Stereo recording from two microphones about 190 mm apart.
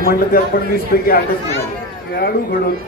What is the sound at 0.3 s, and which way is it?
Speech, 50° left (ahead or behind).